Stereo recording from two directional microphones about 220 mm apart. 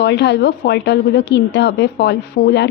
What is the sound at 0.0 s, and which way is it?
A woman's voice, 50° left (ahead or behind).